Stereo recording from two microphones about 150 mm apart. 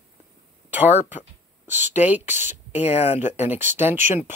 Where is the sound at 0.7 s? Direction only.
10° right (ahead or behind).